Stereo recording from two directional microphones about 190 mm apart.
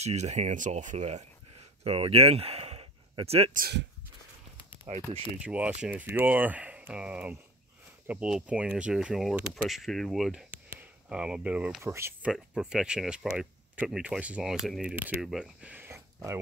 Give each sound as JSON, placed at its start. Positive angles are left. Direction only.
{"t": 0.0, "sound": "speech", "side_deg": -35}
{"t": 3.5, "sound": "speech", "side_deg": -50}
{"t": 4.9, "sound": "speech", "side_deg": -35}
{"t": 5.4, "sound": "speech", "side_deg": -5}
{"t": 12.3, "sound": "speech", "side_deg": -5}